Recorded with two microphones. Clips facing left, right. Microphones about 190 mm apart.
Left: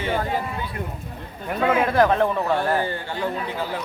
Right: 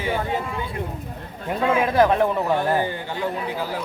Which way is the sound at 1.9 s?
15° right (ahead or behind).